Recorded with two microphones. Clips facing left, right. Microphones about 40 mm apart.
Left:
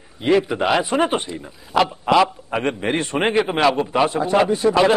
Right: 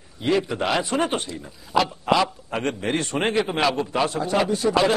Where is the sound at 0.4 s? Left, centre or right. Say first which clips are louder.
Left 4 dB; centre.